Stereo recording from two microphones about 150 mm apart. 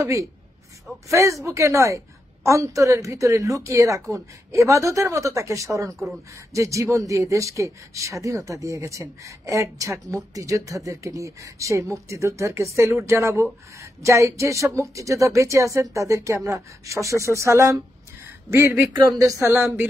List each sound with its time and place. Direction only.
0.0 s a woman's voice: 20° right (ahead or behind)